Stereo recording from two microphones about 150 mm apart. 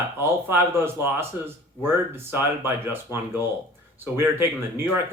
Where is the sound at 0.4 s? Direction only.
15° right (ahead or behind).